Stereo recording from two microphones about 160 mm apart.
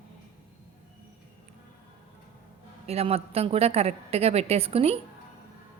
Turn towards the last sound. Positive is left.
turn(degrees=-40)  # may be behind; listen again after turning